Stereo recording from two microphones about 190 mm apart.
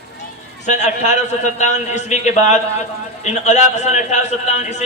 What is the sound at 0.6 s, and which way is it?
A man's voice, 40° left (ahead or behind).